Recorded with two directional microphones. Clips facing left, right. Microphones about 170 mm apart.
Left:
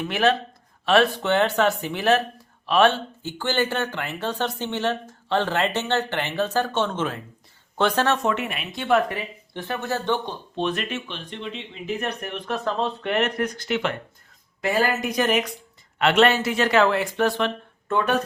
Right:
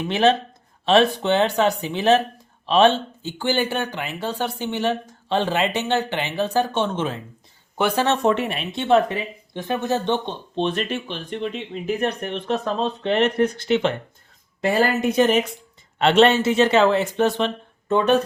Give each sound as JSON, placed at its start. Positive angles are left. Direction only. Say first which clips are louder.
{"t": 0.1, "sound": "speech", "louder": "right 4 dB", "side_deg": -25}
{"t": 8.0, "sound": "speech", "louder": "right 3 dB", "side_deg": -30}
{"t": 12.0, "sound": "speech", "louder": "right 5 dB", "side_deg": -25}